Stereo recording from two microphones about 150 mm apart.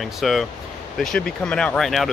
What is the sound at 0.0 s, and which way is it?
Speech, centre (ahead or behind).